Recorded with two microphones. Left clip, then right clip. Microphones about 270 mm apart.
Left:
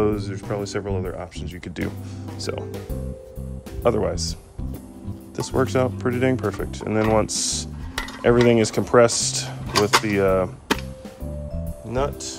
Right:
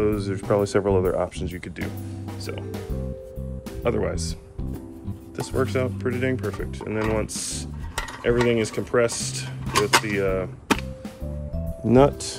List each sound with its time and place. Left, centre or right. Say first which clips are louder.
0.0 s speech: left 1 dB; centre
3.8 s speech: left 4 dB; centre
11.9 s speech: right 7 dB; right